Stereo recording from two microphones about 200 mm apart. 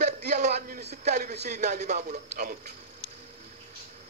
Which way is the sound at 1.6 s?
40° right (ahead or behind).